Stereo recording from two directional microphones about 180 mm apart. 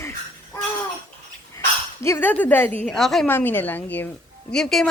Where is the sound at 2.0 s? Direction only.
10° left (ahead or behind).